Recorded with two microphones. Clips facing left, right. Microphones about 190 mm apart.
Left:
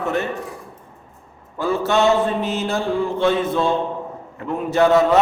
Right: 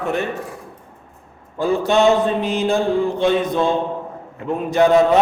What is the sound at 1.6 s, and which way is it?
A man's voice, 15° right (ahead or behind).